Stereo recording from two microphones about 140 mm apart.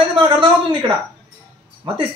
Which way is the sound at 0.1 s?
35° right (ahead or behind).